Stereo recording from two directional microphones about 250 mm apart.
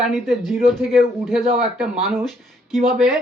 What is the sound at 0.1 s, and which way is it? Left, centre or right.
Speech, centre.